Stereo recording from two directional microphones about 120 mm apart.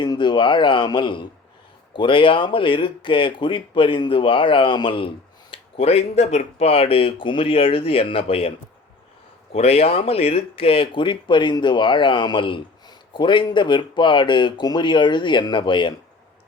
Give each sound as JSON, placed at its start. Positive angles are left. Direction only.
{"t": 0.0, "sound": "speech", "side_deg": 40}